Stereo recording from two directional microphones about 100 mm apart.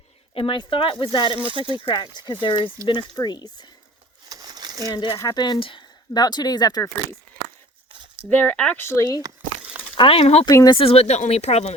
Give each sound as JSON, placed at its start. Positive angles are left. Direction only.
{"t": 0.3, "sound": "speech", "side_deg": 60}
{"t": 1.1, "sound": "speech", "side_deg": 55}
{"t": 1.4, "sound": "speech", "side_deg": -60}
{"t": 1.8, "sound": "speech", "side_deg": 50}
{"t": 4.3, "sound": "a sound", "side_deg": -40}
{"t": 4.9, "sound": "speech", "side_deg": 50}
{"t": 5.1, "sound": "speech", "side_deg": 35}
{"t": 5.4, "sound": "speech", "side_deg": 55}
{"t": 6.1, "sound": "speech", "side_deg": 40}
{"t": 8.2, "sound": "speech", "side_deg": 20}
{"t": 8.8, "sound": "speech", "side_deg": 30}
{"t": 10.0, "sound": "speech", "side_deg": 70}
{"t": 10.7, "sound": "speech", "side_deg": 65}